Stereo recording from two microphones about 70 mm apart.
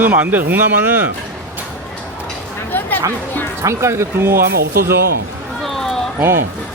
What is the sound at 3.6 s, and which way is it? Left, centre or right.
Speech, right.